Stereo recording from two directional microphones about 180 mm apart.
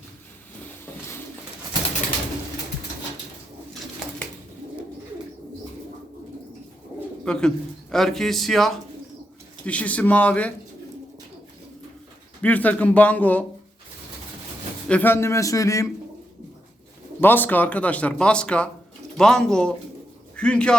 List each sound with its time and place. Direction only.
7.3 s a man's voice: 5° left (ahead or behind)
12.4 s speech: 10° left (ahead or behind)
14.8 s speech: 10° left (ahead or behind)
17.2 s a man's voice: 10° left (ahead or behind)